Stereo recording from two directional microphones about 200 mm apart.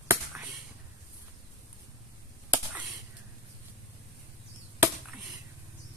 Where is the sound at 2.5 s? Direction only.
5° right (ahead or behind).